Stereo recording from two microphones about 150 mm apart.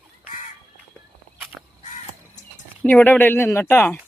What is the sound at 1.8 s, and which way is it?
Crow, 55° left (ahead or behind).